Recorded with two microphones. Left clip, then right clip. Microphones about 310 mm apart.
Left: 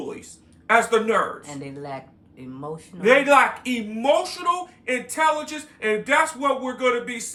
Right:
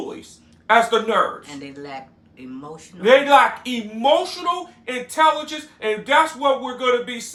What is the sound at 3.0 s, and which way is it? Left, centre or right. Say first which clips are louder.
Speech: right 3 dB; centre.